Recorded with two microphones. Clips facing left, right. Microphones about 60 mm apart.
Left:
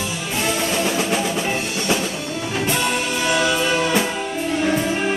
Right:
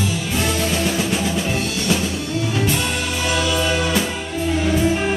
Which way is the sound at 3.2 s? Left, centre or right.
Left.